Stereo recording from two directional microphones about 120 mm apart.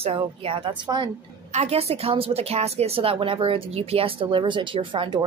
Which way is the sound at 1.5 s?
60° right (ahead or behind).